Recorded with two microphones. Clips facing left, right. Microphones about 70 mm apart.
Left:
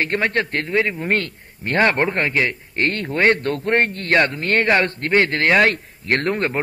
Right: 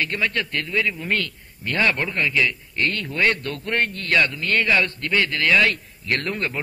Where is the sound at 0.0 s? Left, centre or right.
Left.